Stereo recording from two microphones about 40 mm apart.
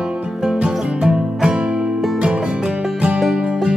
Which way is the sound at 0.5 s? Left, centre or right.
Right.